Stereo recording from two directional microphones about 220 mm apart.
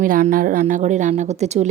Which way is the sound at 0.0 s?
35° right (ahead or behind).